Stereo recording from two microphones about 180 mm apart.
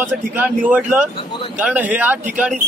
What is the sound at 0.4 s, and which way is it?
A man's voice, 10° right (ahead or behind).